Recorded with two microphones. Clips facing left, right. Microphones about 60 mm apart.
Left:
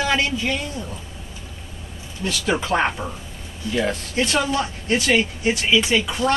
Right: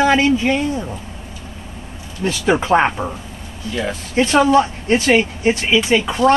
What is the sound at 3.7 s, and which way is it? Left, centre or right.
Speech, centre.